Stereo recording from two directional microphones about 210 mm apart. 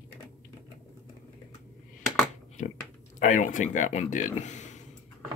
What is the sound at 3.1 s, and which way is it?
Speech, 35° left (ahead or behind).